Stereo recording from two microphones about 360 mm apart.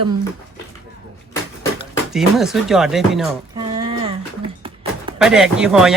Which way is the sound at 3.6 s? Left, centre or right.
Centre.